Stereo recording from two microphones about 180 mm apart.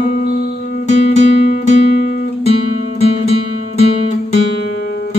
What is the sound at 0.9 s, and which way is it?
Music, 40° left (ahead or behind).